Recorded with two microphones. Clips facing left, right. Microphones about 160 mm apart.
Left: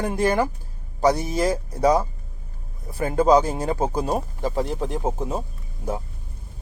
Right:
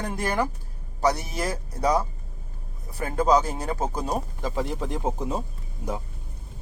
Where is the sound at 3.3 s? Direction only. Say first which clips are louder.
Left 4 dB; 10° left (ahead or behind).